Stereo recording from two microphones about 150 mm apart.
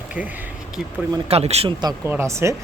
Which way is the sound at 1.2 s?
45° right (ahead or behind).